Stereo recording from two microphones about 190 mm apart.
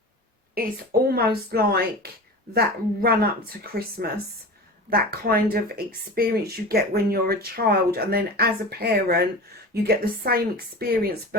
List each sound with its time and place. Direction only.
0.6 s a woman's voice: 50° right (ahead or behind)